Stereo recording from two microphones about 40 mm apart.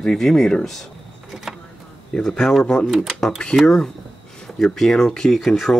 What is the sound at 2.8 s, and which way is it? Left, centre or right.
Speech, centre.